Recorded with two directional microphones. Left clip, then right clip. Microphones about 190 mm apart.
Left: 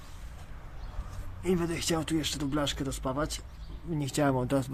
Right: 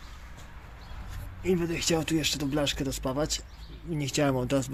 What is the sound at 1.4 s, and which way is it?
Speech, 5° right (ahead or behind).